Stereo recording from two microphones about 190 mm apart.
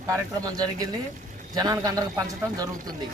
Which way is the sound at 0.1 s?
20° right (ahead or behind).